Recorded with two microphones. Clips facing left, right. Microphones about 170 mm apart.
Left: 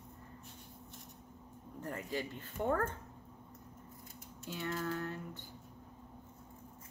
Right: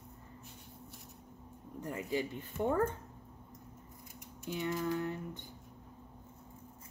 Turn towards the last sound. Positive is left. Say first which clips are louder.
# right 4 dB
turn(degrees=-15)  # may be behind; listen again after turning